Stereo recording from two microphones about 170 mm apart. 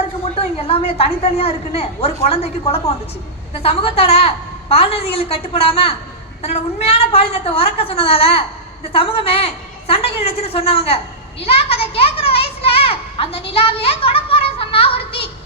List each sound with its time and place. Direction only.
0.3 s a woman's voice: 35° left (ahead or behind)